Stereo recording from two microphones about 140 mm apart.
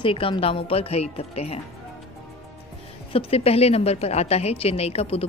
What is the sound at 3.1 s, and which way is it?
Speech, 45° left (ahead or behind).